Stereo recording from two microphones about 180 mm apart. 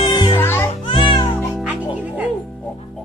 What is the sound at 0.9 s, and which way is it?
Music, 25° left (ahead or behind).